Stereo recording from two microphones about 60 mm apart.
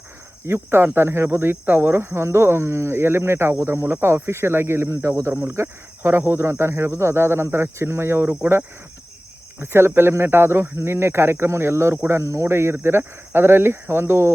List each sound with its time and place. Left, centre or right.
0.4 s speech: right
3.6 s speech: right
3.8 s speech: right
9.6 s speech: right